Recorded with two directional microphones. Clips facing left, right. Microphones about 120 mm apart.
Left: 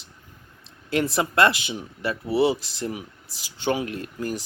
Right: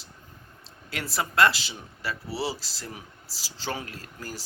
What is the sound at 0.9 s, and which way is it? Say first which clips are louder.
Speech: left 8 dB; 20° left (ahead or behind).